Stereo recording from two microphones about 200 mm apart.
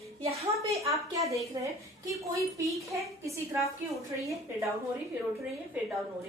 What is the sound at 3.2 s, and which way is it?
Speech, 15° right (ahead or behind).